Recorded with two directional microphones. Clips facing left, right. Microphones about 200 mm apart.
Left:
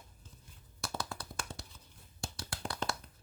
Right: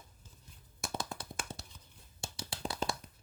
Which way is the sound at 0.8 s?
20° right (ahead or behind).